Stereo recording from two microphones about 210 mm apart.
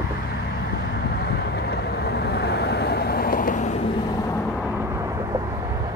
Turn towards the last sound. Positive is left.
turn(degrees=-15)  # may be behind; listen again after turning